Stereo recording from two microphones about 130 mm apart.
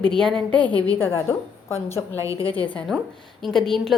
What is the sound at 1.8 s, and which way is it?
Speech, 20° left (ahead or behind).